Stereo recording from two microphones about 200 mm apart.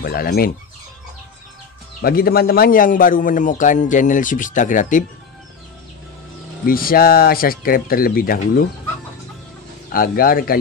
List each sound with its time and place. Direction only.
0.0 s speech: 50° left (ahead or behind)
2.0 s a man's voice: 50° left (ahead or behind)
6.6 s speech: 45° left (ahead or behind)
9.8 s speech: 50° left (ahead or behind)